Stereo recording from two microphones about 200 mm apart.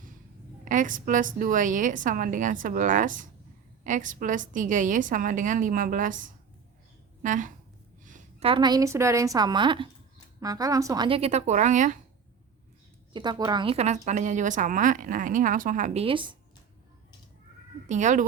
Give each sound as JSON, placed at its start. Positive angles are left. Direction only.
{"t": 0.6, "sound": "a woman's voice", "side_deg": -40}
{"t": 7.2, "sound": "a woman's voice", "side_deg": -40}
{"t": 8.0, "sound": "a sound", "side_deg": -40}
{"t": 8.4, "sound": "a woman's voice", "side_deg": -20}
{"t": 13.1, "sound": "a woman's voice", "side_deg": -20}
{"t": 17.8, "sound": "a woman's voice", "side_deg": -35}